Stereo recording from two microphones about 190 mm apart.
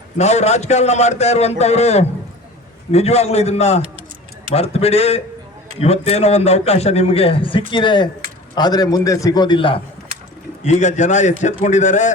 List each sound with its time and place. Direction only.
0.2 s a man's voice: 35° left (ahead or behind)
10.6 s a man's voice: 40° left (ahead or behind)